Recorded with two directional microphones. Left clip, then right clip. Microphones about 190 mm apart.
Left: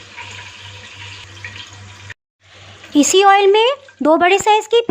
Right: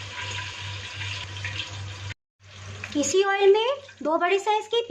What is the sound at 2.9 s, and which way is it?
Speech, 40° left (ahead or behind).